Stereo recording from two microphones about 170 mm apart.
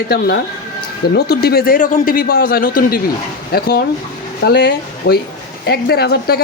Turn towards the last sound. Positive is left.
turn(degrees=70)  # may be behind; listen again after turning